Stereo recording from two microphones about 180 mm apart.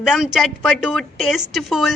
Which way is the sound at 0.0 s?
Centre (ahead or behind).